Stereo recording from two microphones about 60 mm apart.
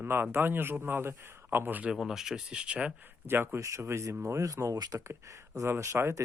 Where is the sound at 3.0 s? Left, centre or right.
Right.